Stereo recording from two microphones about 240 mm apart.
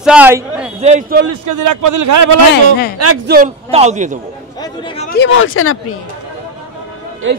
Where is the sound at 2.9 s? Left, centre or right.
Right.